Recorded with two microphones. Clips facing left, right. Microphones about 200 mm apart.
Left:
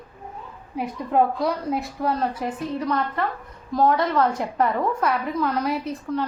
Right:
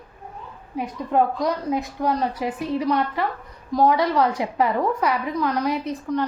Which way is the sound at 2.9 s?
10° right (ahead or behind).